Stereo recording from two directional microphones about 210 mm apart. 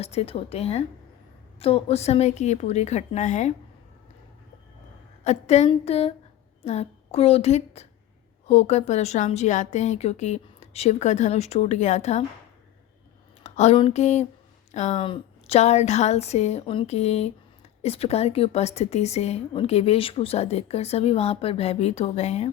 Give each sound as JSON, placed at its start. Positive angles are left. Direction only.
{"t": 0.0, "sound": "a woman's voice", "side_deg": 30}
{"t": 5.2, "sound": "a woman's voice", "side_deg": 30}
{"t": 13.4, "sound": "a woman's voice", "side_deg": 30}